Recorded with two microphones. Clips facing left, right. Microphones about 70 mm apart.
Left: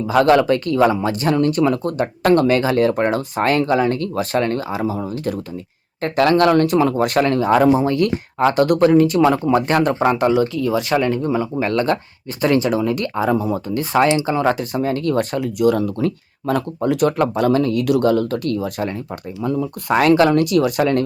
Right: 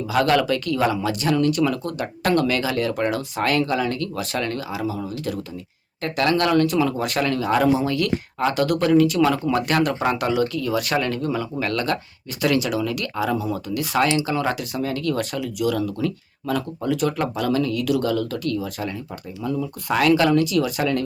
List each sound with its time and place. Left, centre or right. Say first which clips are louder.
0.1 s speech: left 6 dB; left